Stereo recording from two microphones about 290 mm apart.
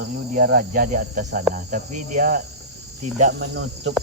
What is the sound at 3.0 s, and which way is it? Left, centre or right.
Speech, right.